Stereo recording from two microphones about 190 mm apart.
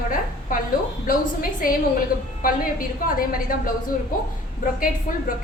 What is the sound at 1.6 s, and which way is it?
A woman's voice, 45° left (ahead or behind).